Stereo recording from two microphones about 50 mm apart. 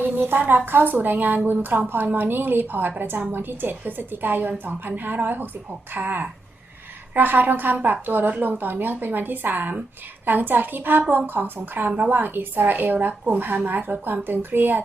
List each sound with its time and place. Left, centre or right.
0.0 s a woman's voice: right
11.9 s a woman's voice: right
12.1 s a woman's voice: right